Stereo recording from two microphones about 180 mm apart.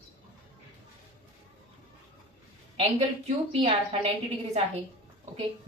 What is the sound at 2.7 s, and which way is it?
A woman's voice, 35° right (ahead or behind).